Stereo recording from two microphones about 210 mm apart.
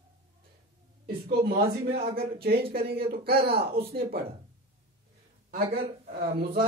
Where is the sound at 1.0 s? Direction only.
50° right (ahead or behind).